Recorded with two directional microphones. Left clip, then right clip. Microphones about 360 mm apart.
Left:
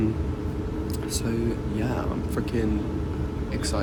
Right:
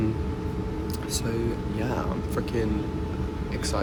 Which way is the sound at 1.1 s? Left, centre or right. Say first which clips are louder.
Even; centre.